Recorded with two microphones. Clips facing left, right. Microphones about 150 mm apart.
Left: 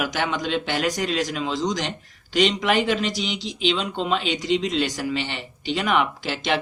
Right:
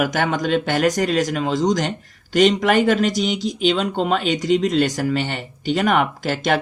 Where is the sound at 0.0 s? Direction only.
50° right (ahead or behind).